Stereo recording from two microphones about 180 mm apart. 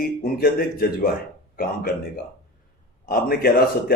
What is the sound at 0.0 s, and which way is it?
Speech, 55° left (ahead or behind).